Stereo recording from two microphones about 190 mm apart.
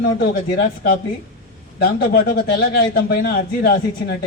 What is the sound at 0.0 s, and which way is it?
Speech, 55° left (ahead or behind).